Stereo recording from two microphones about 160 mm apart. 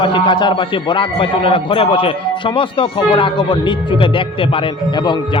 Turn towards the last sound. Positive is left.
turn(degrees=30)  # may be behind; listen again after turning